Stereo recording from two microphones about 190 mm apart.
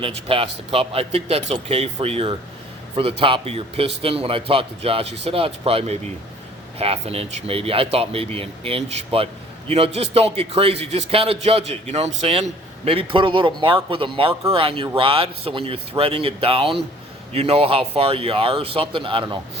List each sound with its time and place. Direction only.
0.0 s a man's voice: 30° right (ahead or behind)